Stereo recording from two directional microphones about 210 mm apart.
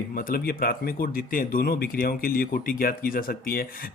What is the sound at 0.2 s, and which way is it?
Speech, 45° left (ahead or behind).